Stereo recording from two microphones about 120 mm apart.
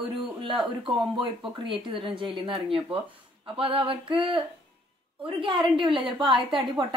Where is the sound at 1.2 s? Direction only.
45° right (ahead or behind).